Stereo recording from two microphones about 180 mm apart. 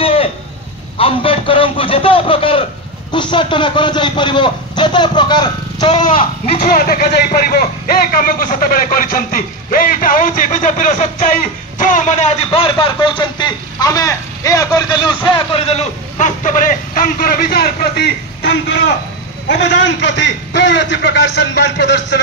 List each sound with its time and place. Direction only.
0.0 s a sound: 30° left (ahead or behind)
0.9 s a man's voice: 30° left (ahead or behind)
6.6 s a man's voice: 55° left (ahead or behind); by 22.0 s 75° left (ahead or behind)